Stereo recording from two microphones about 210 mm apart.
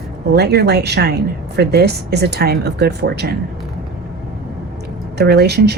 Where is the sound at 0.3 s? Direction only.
50° right (ahead or behind).